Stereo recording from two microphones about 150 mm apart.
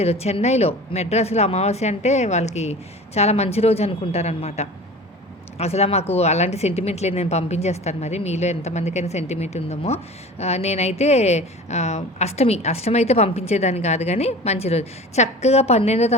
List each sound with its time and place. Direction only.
0.0 s speech: 45° left (ahead or behind)